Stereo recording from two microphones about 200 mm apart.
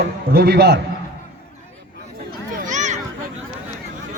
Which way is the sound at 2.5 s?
40° right (ahead or behind).